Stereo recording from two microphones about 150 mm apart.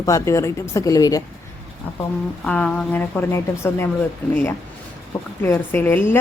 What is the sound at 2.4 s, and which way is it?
A woman's voice, 5° left (ahead or behind).